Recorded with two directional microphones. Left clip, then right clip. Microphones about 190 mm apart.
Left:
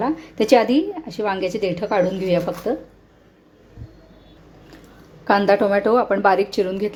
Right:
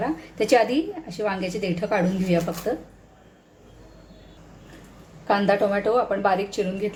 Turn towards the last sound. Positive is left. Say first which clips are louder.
# left 6 dB
turn(degrees=45)  # may be behind; listen again after turning